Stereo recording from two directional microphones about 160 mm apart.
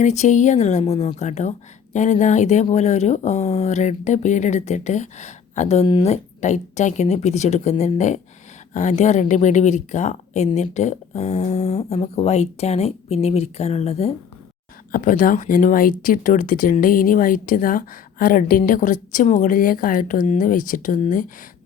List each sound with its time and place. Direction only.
0.0 s speech: 45° left (ahead or behind)
14.9 s speech: 55° left (ahead or behind)